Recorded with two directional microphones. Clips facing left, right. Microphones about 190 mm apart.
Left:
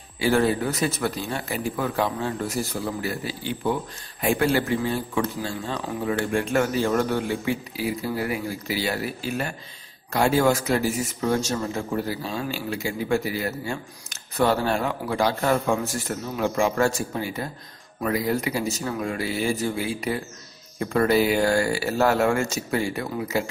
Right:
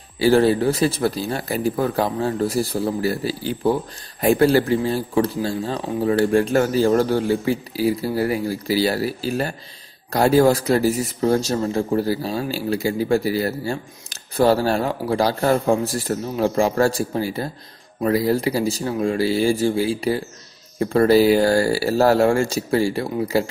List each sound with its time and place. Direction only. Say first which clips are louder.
0.2 s speech: right 6 dB; 35° right (ahead or behind)